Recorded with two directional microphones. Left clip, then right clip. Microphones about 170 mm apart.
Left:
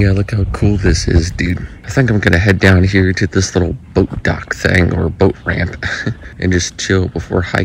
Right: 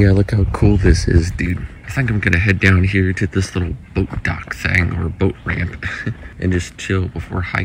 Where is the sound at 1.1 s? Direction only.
20° left (ahead or behind).